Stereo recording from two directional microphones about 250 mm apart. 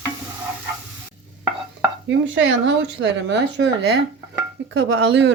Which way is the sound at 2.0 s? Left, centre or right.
Right.